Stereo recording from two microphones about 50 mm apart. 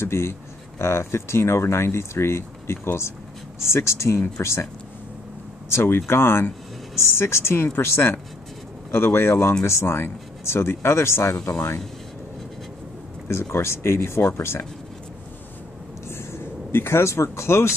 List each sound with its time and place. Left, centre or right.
0.0 s speech: left
3.7 s speech: left
5.7 s speech: left
13.3 s speech: left
16.1 s speech: left